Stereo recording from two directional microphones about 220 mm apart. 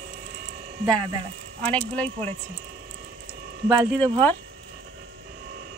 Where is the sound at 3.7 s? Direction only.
Centre (ahead or behind).